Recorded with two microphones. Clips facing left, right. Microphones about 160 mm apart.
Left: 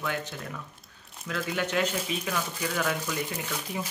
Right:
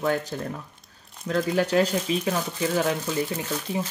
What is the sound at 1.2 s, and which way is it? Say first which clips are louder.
Speech: right 7 dB; 35° right (ahead or behind).